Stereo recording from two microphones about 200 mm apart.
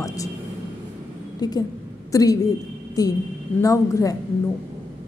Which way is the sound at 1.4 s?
20° left (ahead or behind).